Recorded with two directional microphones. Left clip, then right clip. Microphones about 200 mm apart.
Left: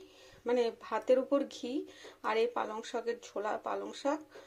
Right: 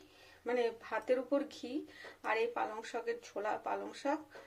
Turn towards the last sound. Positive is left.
turn(degrees=20)  # may be behind; listen again after turning